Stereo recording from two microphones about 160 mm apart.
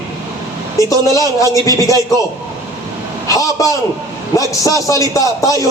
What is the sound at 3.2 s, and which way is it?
A man's voice, 20° left (ahead or behind).